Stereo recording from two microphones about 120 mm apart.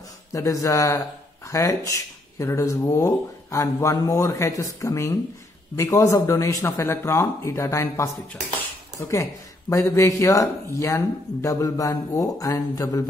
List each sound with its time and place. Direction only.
0.3 s speech: 25° left (ahead or behind)